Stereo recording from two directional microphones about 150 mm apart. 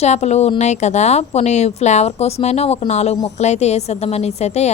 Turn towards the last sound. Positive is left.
turn(degrees=45)  # may be behind; listen again after turning